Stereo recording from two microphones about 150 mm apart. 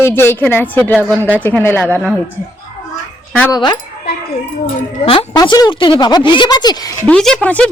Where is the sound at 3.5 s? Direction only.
30° left (ahead or behind).